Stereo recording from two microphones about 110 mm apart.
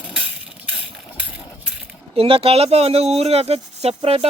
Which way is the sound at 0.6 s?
10° right (ahead or behind).